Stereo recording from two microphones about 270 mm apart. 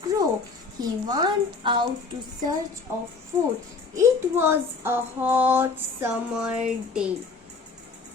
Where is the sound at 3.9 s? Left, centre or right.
Centre.